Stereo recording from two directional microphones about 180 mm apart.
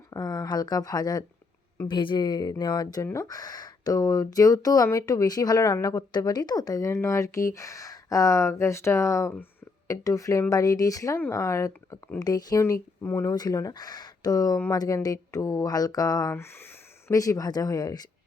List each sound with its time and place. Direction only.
0.1 s speech: 20° left (ahead or behind)